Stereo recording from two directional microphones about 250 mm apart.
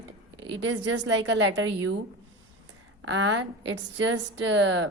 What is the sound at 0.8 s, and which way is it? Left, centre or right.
A woman's voice, right.